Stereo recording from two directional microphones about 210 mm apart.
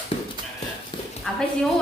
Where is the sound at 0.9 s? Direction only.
25° left (ahead or behind).